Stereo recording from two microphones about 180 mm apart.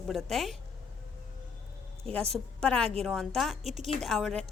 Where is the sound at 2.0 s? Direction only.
5° left (ahead or behind).